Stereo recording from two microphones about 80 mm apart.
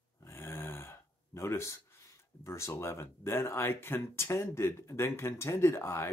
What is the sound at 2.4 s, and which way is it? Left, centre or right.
Speech, left.